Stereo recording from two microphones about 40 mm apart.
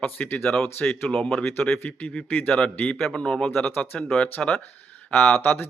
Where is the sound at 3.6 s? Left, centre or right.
Left.